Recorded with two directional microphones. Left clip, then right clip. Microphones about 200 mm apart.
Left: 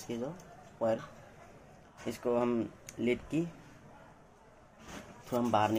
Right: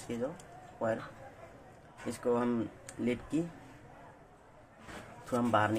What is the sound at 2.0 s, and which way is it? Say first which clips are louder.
Speech: even; 30° left (ahead or behind).